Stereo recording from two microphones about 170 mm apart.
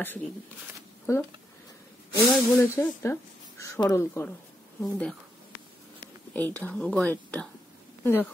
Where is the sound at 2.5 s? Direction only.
15° left (ahead or behind).